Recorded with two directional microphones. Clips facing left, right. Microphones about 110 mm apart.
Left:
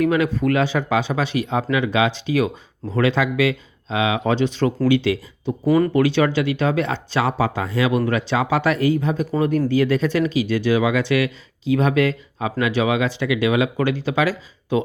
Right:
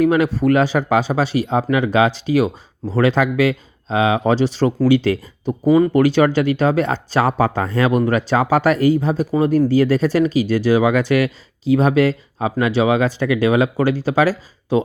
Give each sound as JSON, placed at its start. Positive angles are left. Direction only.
{"t": 0.0, "sound": "speech", "side_deg": -35}
{"t": 5.5, "sound": "speech", "side_deg": -15}
{"t": 5.9, "sound": "speech", "side_deg": -40}